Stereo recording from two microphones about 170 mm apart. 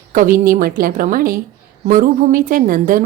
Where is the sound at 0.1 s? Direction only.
55° right (ahead or behind).